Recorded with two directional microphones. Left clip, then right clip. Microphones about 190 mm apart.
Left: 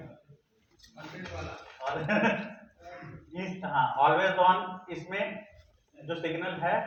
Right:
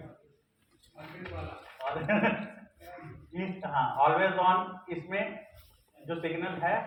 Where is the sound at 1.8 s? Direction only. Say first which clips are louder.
Left 1 dB; 25° left (ahead or behind).